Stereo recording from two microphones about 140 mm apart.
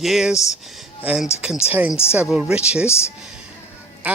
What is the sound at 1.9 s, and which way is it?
Speech, 20° left (ahead or behind).